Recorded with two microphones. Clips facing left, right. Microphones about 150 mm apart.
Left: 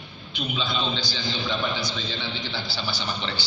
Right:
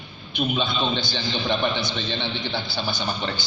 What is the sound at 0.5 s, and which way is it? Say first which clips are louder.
A man's voice: even; 55° right (ahead or behind).